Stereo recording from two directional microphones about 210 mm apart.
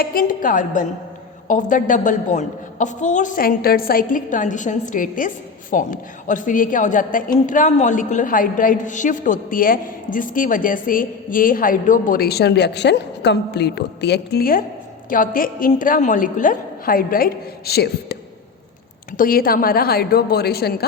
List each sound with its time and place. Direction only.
0.0 s a woman's voice: 45° left (ahead or behind)